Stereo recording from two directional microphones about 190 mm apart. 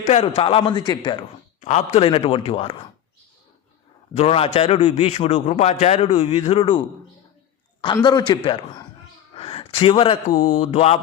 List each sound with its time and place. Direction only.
0.0 s a man's voice: 35° left (ahead or behind)
1.6 s a man's voice: 35° left (ahead or behind)
4.1 s a man's voice: 35° left (ahead or behind)
7.9 s a man's voice: 25° left (ahead or behind)